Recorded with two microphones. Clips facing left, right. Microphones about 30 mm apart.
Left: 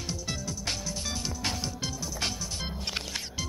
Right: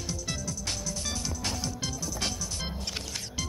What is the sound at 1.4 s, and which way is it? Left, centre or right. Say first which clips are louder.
Music: left 1 dB; centre.